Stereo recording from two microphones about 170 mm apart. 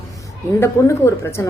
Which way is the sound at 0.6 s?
15° left (ahead or behind).